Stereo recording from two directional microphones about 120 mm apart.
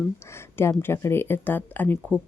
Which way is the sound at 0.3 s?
20° left (ahead or behind).